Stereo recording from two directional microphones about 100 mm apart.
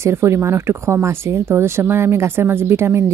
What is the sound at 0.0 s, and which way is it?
Speech, 25° right (ahead or behind).